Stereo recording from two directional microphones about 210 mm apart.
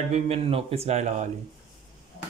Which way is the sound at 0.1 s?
30° right (ahead or behind).